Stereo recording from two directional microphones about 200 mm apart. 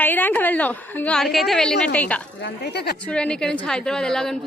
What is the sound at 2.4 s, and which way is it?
Speech, 55° left (ahead or behind).